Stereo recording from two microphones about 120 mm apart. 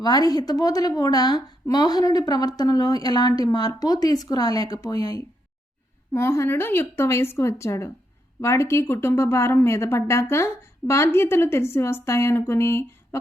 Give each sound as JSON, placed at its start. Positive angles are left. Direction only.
{"t": 0.0, "sound": "a woman's voice", "side_deg": 35}
{"t": 6.1, "sound": "a woman's voice", "side_deg": 20}